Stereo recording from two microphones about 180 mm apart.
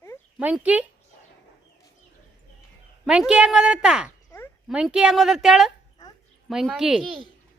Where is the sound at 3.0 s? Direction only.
5° right (ahead or behind).